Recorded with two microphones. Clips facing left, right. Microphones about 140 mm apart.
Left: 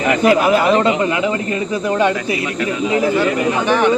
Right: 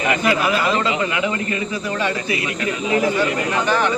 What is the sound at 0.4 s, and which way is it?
Speech, 50° left (ahead or behind).